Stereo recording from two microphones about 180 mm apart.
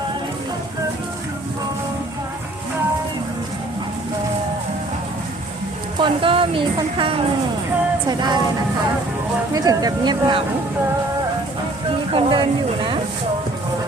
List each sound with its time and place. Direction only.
6.0 s speech: 30° right (ahead or behind)
9.5 s speech: 20° right (ahead or behind)
12.1 s speech: 30° right (ahead or behind)